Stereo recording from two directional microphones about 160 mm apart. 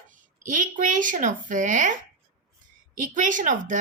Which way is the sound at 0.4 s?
55° right (ahead or behind).